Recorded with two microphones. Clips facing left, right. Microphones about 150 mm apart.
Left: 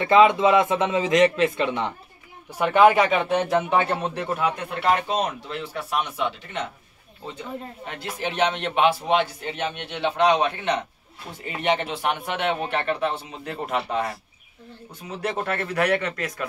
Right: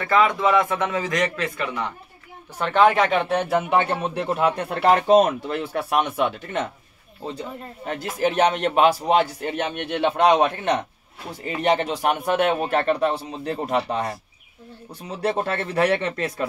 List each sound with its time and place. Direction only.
0.0 s a man's voice: 25° left (ahead or behind)
2.6 s speech: 10° left (ahead or behind)
4.4 s speech: 35° right (ahead or behind); by 6.7 s 50° right (ahead or behind)
7.2 s speech: 40° right (ahead or behind)
15.2 s speech: 30° right (ahead or behind)